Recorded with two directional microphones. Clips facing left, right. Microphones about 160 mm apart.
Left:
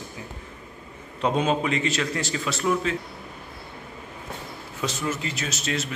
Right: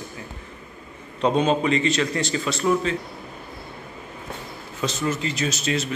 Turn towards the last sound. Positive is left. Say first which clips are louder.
# right 4 dB
turn(degrees=0)  # may be behind; listen again after turning